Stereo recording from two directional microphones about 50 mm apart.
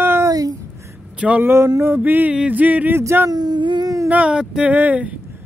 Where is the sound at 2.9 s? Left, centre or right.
Right.